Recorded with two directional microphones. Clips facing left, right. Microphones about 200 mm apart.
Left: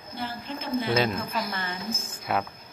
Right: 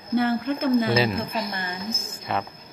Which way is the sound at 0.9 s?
Centre (ahead or behind).